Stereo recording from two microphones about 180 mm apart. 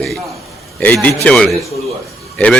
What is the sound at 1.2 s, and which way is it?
Speech, 5° left (ahead or behind).